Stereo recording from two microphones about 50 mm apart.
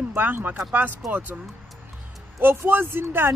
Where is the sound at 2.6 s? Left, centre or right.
Right.